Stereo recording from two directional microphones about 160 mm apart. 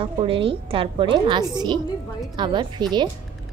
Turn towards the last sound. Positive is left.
turn(degrees=-30)  # may be behind; listen again after turning